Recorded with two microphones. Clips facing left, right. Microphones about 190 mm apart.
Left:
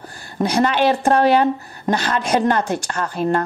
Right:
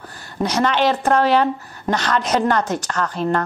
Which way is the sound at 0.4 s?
10° left (ahead or behind).